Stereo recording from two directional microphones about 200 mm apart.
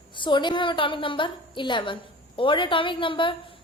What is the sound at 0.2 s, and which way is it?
A woman's voice, 25° left (ahead or behind).